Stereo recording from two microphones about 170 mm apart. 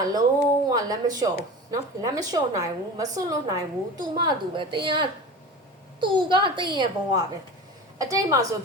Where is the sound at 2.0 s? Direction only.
20° right (ahead or behind).